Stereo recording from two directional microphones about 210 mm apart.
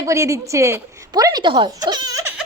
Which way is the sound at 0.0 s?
15° right (ahead or behind).